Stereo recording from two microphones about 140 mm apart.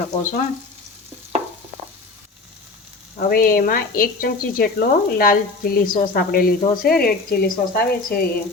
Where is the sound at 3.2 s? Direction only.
90° left.